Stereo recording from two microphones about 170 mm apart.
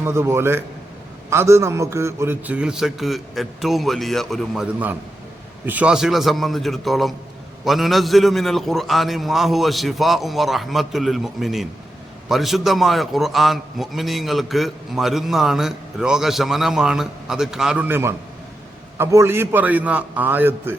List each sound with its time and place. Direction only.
0.0 s a man's voice: 15° right (ahead or behind)